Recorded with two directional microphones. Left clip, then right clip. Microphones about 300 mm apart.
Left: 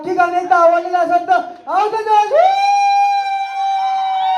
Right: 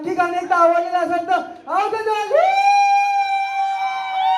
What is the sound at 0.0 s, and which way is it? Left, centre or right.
Speech, left.